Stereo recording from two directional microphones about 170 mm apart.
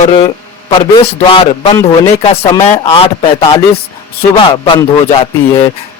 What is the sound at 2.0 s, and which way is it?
Speech, 35° left (ahead or behind).